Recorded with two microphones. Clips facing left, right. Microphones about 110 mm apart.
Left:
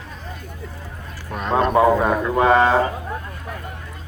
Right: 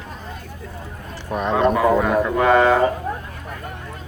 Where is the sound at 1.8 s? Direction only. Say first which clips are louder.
Left 1 dB; 30° left (ahead or behind).